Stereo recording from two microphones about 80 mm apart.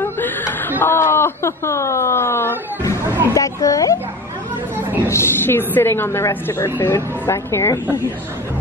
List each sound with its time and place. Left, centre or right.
0.0 s speech: left
3.3 s speech: left
4.7 s a sound: right
5.1 s a woman's voice: left